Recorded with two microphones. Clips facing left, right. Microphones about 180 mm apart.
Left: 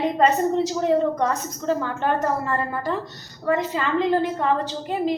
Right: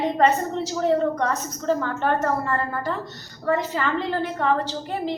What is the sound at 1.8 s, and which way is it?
A woman's voice, 15° left (ahead or behind).